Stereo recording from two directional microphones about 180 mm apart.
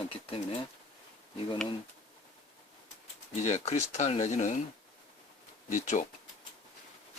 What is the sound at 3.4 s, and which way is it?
Speech, 40° left (ahead or behind).